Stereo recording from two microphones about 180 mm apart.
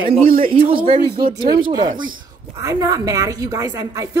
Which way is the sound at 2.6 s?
20° right (ahead or behind).